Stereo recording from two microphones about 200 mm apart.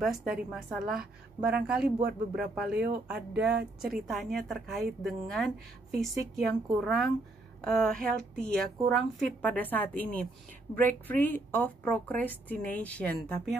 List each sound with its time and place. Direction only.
0.0 s a woman's voice: centre (ahead or behind)
3.4 s a woman's voice: 55° right (ahead or behind)
3.9 s a woman's voice: centre (ahead or behind)
11.1 s a woman's voice: 10° left (ahead or behind)